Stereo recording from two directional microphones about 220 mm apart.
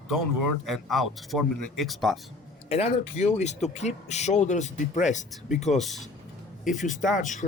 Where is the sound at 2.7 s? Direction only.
30° left (ahead or behind).